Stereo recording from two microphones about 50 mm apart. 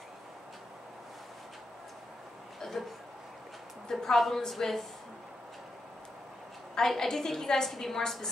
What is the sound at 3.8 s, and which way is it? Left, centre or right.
A woman's voice, centre.